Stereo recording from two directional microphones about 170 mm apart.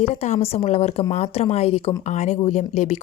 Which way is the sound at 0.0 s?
40° left (ahead or behind).